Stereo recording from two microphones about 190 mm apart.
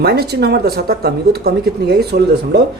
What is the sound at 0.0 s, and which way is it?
Speech, 60° right (ahead or behind).